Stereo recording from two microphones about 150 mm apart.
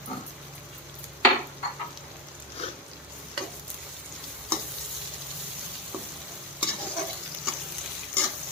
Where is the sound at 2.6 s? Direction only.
45° left (ahead or behind).